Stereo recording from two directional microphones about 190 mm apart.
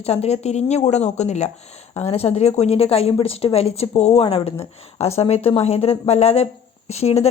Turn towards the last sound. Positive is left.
turn(degrees=30)  # may be behind; listen again after turning